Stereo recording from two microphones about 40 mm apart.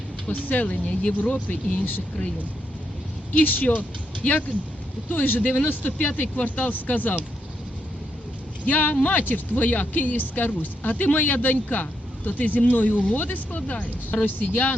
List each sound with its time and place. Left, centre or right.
0.3 s speech: left
0.9 s speech: left
1.5 s speech: left
3.3 s speech: left
4.2 s speech: left
5.0 s speech: left
8.7 s speech: left